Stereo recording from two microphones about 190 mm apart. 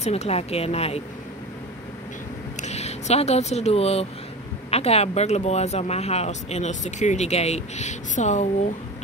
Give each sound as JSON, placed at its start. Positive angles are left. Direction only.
{"t": 0.0, "sound": "speech", "side_deg": 35}
{"t": 2.6, "sound": "speech", "side_deg": 35}